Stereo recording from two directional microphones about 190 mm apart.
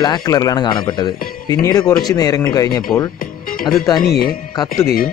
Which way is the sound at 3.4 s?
50° left (ahead or behind).